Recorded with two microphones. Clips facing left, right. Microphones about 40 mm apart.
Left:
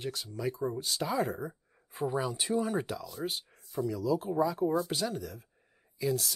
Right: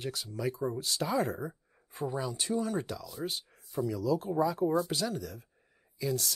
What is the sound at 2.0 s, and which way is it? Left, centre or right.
Speech, centre.